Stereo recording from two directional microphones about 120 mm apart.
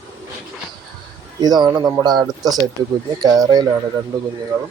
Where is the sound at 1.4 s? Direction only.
35° right (ahead or behind).